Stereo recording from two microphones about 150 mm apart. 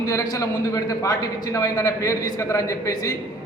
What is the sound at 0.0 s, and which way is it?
A man's voice, 25° left (ahead or behind).